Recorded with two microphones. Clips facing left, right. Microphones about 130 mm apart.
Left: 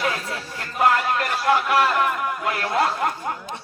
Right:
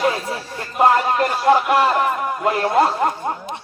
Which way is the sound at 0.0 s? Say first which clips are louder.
Right 5 dB; 30° right (ahead or behind).